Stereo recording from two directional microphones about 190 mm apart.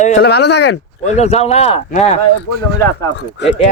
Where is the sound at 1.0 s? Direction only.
35° left (ahead or behind).